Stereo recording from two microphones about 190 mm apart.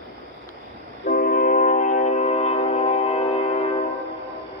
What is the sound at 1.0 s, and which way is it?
Train, 50° left (ahead or behind).